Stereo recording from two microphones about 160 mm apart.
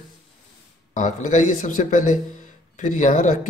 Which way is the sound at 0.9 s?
55° left (ahead or behind).